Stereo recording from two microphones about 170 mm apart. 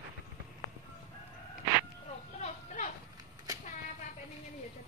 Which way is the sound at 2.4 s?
45° left (ahead or behind).